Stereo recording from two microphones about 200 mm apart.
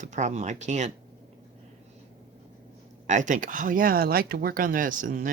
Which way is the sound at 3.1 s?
40° right (ahead or behind).